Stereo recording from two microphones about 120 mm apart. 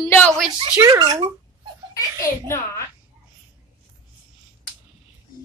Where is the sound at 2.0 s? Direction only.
20° left (ahead or behind).